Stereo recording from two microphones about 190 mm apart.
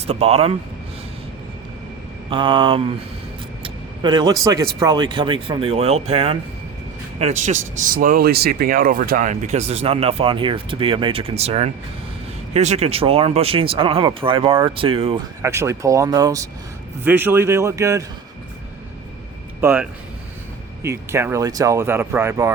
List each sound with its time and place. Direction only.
0.1 s speech: 35° right (ahead or behind)
2.3 s speech: 25° right (ahead or behind)
15.4 s speech: 15° right (ahead or behind)
19.6 s speech: 10° right (ahead or behind)